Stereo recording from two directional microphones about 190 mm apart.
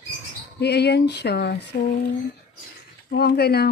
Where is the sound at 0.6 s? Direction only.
60° left (ahead or behind).